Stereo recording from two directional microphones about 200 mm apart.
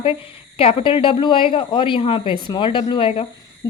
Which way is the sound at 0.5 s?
25° left (ahead or behind).